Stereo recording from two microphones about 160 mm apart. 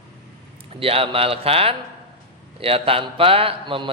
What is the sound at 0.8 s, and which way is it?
A man's voice, 35° right (ahead or behind).